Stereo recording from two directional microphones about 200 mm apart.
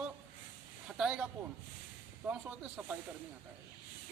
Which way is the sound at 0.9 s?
5° right (ahead or behind).